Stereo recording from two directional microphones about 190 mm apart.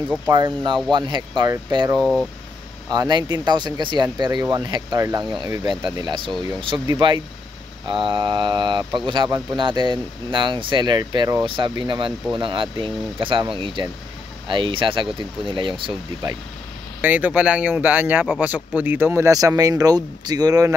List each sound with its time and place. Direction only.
0.1 s speech: 20° right (ahead or behind)
2.0 s speech: 5° left (ahead or behind)
2.9 s speech: 20° right (ahead or behind)
17.0 s speech: 10° right (ahead or behind)